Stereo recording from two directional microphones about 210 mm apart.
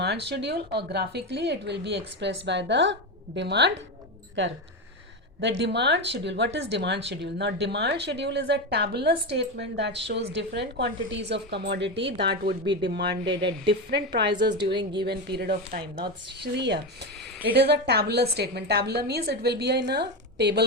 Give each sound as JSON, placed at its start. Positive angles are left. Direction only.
{"t": 0.0, "sound": "speech", "side_deg": -50}
{"t": 5.4, "sound": "speech", "side_deg": -55}